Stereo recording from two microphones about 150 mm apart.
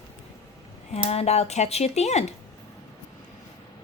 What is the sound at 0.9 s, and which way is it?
Speech, 45° left (ahead or behind).